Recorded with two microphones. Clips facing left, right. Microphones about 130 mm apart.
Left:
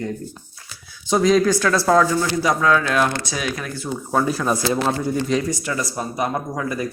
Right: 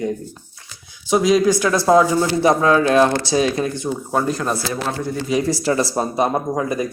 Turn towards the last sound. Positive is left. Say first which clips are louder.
# right 4 dB
turn(degrees=-20)  # may be behind; listen again after turning